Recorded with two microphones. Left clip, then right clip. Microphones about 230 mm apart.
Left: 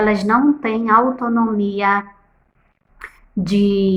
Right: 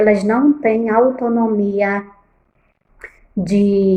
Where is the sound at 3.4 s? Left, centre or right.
Left.